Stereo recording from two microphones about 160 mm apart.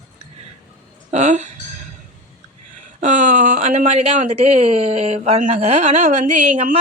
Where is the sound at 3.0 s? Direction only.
55° right (ahead or behind).